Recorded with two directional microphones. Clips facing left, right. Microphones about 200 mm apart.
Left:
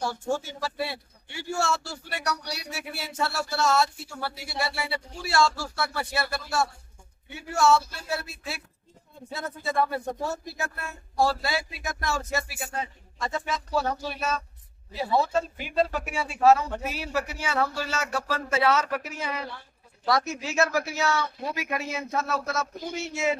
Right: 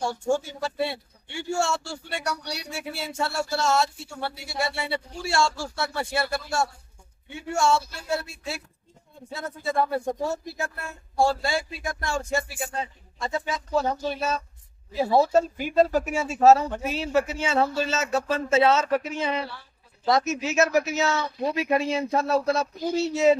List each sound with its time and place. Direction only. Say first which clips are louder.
0.3 s speech: right 6 dB; 25° right (ahead or behind)
9.8 s speech: right 2 dB; 25° right (ahead or behind)
15.0 s speech: right 5 dB; 40° right (ahead or behind)
16.8 s speech: right 6 dB; 25° right (ahead or behind)